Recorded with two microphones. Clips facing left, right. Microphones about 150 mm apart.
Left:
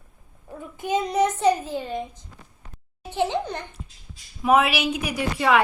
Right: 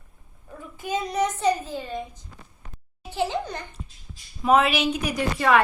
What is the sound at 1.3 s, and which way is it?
Speech, 15° left (ahead or behind).